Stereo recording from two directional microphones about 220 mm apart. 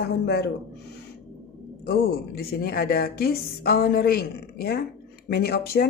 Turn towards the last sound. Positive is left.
turn(degrees=45)  # may be behind; listen again after turning